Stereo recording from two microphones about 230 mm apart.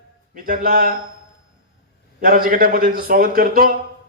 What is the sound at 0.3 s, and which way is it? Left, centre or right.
Speech, right.